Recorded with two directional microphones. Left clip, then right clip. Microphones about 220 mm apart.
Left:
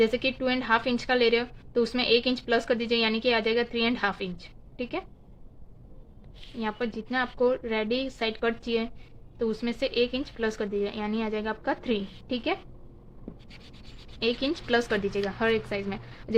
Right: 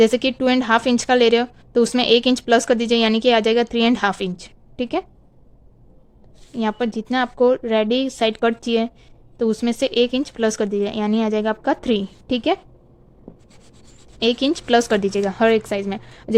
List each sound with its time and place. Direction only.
0.0 s a woman's voice: 55° right (ahead or behind)
6.6 s a woman's voice: 50° right (ahead or behind)
14.2 s a woman's voice: 55° right (ahead or behind)